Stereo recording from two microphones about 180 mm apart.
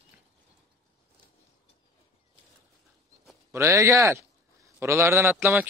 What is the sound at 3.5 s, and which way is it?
A man's voice, 15° right (ahead or behind).